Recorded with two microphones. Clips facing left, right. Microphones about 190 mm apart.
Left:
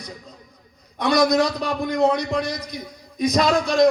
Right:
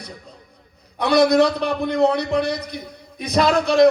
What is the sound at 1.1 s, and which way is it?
A man's voice, 60° right (ahead or behind).